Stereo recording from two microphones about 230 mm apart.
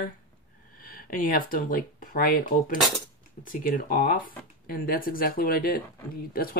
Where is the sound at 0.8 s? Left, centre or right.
Left.